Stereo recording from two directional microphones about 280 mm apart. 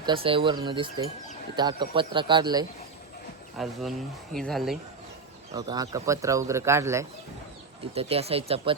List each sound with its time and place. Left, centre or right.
0.0 s speech: centre
3.6 s speech: centre
5.5 s speech: centre
7.9 s speech: right